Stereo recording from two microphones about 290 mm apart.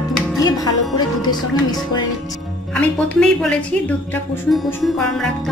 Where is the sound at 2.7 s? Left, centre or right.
Centre.